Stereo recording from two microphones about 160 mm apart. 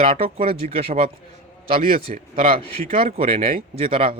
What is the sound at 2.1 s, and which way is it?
Speech, 50° right (ahead or behind).